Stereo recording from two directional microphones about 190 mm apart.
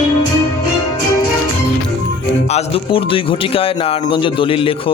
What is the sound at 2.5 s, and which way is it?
A man's voice, 30° left (ahead or behind).